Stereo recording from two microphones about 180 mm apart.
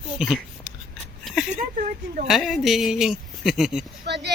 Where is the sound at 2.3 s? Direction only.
Centre (ahead or behind).